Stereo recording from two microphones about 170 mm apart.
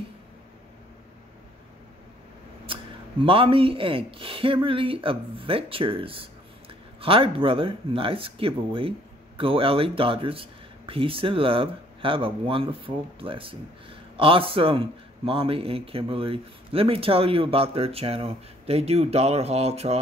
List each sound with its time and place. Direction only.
2.6 s speech: 30° right (ahead or behind)